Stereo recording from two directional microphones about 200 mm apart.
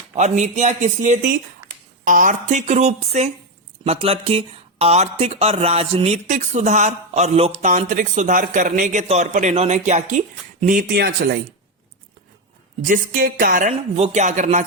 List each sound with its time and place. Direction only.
0.1 s speech: 35° right (ahead or behind)
12.8 s speech: 45° right (ahead or behind)